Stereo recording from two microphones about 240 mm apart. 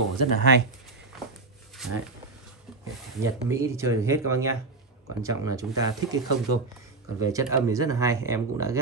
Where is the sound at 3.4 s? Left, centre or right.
Centre.